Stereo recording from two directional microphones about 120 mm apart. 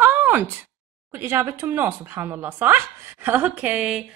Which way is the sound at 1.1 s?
20° right (ahead or behind).